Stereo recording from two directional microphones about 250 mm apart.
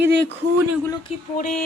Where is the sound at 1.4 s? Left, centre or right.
Left.